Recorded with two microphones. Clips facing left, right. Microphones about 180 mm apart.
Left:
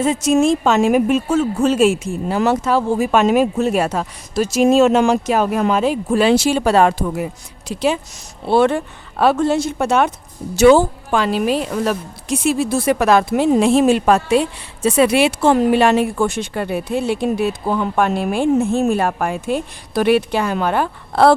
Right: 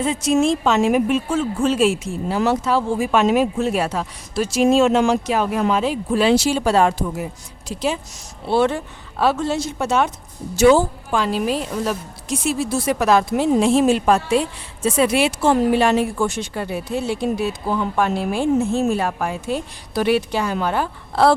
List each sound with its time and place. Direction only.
0.0 s a woman's voice: 45° left (ahead or behind); by 7.9 s 65° left (ahead or behind)
8.4 s speech: 55° left (ahead or behind)